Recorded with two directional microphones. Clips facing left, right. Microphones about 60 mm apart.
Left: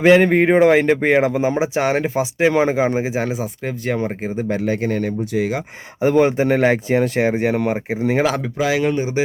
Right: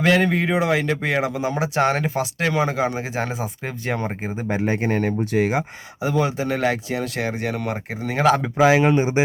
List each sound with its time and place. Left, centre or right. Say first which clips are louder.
0.0 s speech: left 6 dB; left
0.3 s speech: left 7 dB; left
3.0 s speech: left 4 dB; centre
4.6 s speech: right 2 dB; right
6.0 s speech: left 7 dB; left
7.7 s speech: left 7 dB; centre
8.5 s speech: right 3 dB; right